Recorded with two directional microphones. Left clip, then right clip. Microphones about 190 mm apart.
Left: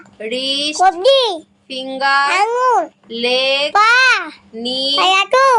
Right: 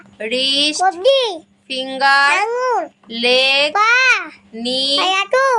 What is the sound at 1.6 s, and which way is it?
Speech, 50° right (ahead or behind).